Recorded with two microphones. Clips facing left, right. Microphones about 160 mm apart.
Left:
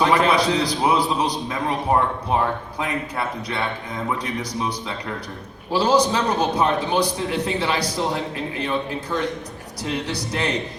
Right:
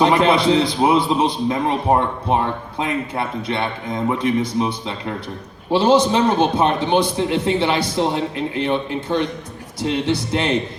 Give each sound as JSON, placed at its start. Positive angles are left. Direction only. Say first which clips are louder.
{"t": 0.0, "sound": "a man's voice", "louder": "right 3 dB", "side_deg": -25}